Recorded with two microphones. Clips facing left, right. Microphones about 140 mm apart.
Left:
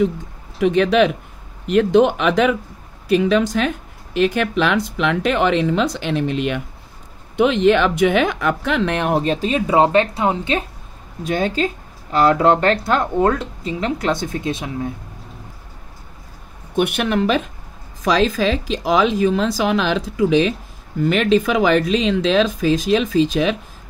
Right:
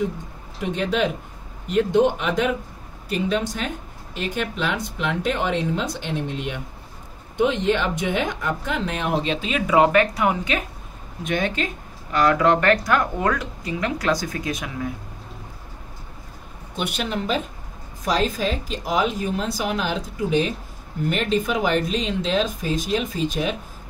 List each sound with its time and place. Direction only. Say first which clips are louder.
0.6 s speech: left 8 dB; 85° left
3.1 s speech: left 8 dB; 80° left; by 14.9 s 25° left (ahead or behind)
16.7 s speech: left 8 dB; 60° left (ahead or behind)
18.0 s speech: left 6 dB; 90° left